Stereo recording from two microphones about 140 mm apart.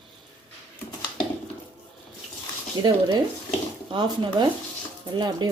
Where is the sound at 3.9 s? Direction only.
30° right (ahead or behind).